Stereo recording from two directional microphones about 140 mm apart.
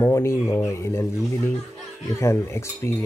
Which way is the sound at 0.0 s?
20° left (ahead or behind).